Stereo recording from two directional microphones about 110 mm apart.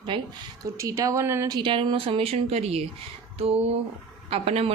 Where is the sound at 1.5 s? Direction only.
50° right (ahead or behind); by 4.7 s 65° right (ahead or behind).